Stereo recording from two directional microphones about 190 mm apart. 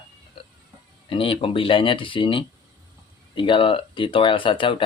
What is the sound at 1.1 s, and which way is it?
Speech, 30° left (ahead or behind).